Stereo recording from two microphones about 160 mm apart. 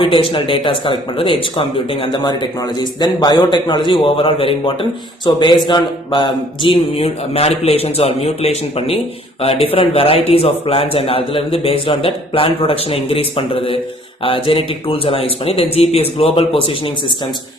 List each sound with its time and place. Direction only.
0.0 s a man's voice: 35° left (ahead or behind)